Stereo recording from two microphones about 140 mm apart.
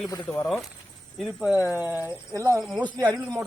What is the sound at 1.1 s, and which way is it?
Speech, centre (ahead or behind).